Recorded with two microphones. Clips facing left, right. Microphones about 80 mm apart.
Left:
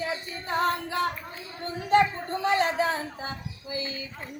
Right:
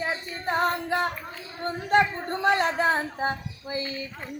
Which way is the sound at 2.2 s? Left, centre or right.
Right.